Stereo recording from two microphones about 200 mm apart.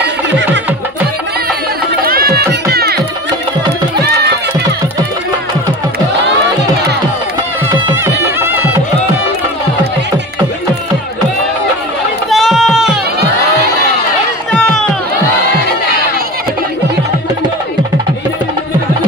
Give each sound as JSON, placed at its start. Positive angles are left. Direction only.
{"t": 2.0, "sound": "music", "side_deg": -50}
{"t": 7.9, "sound": "music", "side_deg": -10}
{"t": 12.3, "sound": "a sound", "side_deg": 0}
{"t": 14.5, "sound": "run", "side_deg": 5}